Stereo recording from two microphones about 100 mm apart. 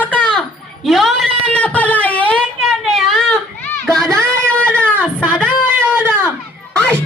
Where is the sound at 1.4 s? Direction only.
15° left (ahead or behind).